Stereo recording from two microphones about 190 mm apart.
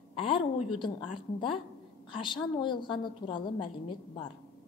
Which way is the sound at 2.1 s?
25° left (ahead or behind).